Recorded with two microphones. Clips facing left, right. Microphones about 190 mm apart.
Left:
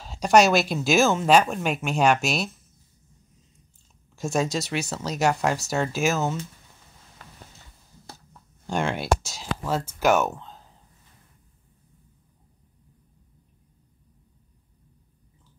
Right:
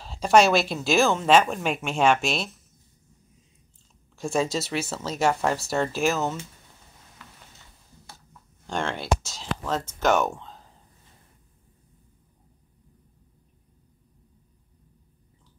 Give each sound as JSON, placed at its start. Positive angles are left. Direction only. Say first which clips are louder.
{"t": 0.0, "sound": "speech", "louder": "left 1 dB", "side_deg": 0}
{"t": 4.2, "sound": "speech", "louder": "even", "side_deg": 0}
{"t": 8.6, "sound": "speech", "louder": "left 2 dB", "side_deg": 10}